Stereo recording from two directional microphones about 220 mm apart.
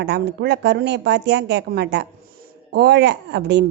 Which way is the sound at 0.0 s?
50° right (ahead or behind).